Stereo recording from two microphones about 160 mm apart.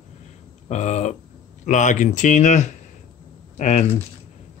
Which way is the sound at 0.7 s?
45° left (ahead or behind).